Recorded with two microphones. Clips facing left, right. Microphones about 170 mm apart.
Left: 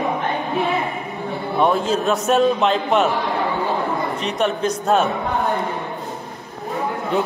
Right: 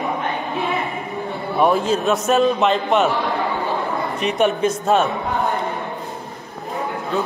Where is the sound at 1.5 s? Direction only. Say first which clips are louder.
Right 1 dB; centre (ahead or behind).